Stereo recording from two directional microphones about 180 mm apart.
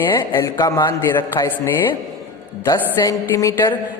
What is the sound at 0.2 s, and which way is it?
Speech, 20° left (ahead or behind).